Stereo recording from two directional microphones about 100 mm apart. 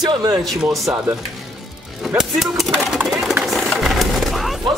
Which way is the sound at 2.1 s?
5° right (ahead or behind).